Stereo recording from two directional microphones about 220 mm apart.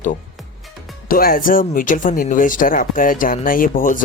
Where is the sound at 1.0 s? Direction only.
40° left (ahead or behind).